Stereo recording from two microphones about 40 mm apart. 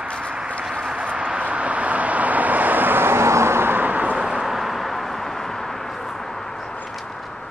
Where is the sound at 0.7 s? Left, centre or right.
Centre.